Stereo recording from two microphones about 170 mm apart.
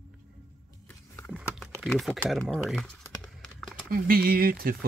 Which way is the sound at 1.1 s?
Centre (ahead or behind).